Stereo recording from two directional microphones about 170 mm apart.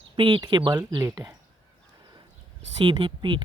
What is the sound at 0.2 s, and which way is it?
Speech, 30° right (ahead or behind).